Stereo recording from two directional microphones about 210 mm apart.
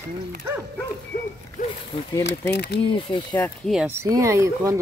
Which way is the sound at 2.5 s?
50° left (ahead or behind).